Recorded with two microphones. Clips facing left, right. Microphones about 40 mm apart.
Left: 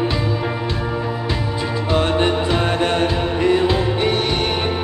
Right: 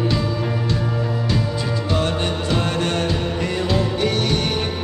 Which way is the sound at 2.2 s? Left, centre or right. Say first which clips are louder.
Left 4 dB; left.